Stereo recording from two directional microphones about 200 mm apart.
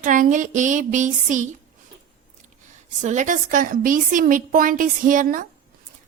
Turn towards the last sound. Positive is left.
turn(degrees=-40)  # may be behind; listen again after turning